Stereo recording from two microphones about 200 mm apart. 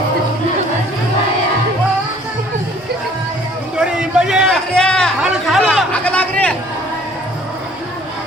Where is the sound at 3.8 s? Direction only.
5° right (ahead or behind).